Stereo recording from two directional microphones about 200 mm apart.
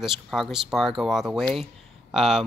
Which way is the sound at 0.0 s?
Centre (ahead or behind).